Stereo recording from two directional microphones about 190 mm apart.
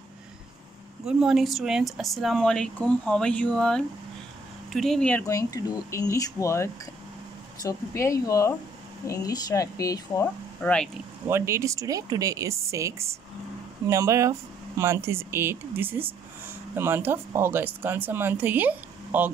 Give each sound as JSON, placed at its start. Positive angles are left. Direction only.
{"t": 1.0, "sound": "speech", "side_deg": 0}
{"t": 5.2, "sound": "speech", "side_deg": 15}
{"t": 11.2, "sound": "speech", "side_deg": -15}